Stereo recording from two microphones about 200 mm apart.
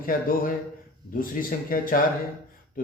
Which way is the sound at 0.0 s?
45° left (ahead or behind).